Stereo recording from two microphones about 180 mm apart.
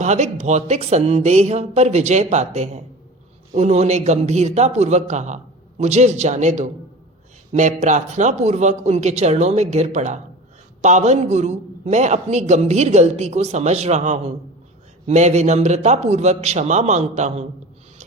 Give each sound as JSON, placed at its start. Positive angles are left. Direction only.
{"t": 0.0, "sound": "a man's voice", "side_deg": -40}